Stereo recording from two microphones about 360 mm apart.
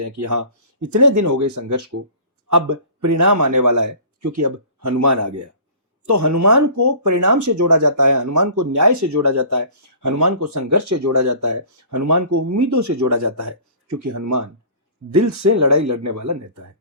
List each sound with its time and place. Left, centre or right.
0.2 s speech: right